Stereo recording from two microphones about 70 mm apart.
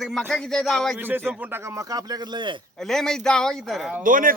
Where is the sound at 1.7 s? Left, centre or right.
Right.